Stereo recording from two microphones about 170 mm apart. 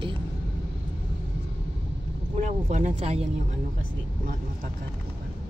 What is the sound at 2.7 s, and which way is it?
Speech, 45° right (ahead or behind).